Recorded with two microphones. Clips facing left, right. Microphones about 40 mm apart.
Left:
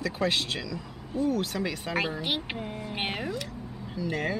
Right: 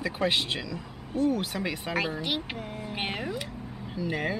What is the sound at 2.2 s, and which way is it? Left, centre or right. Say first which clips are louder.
Speech: even; centre.